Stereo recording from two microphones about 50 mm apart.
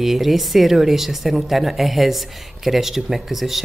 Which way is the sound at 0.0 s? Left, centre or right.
Centre.